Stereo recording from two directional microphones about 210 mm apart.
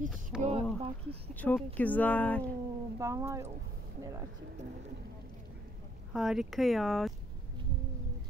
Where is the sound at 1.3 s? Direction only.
5° left (ahead or behind).